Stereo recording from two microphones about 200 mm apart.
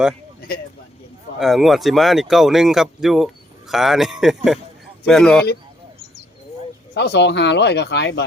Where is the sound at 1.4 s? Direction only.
Centre (ahead or behind).